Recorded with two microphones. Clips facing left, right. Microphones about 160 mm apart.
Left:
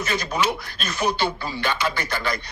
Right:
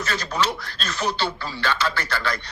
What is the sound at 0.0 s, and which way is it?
Speech, 10° left (ahead or behind).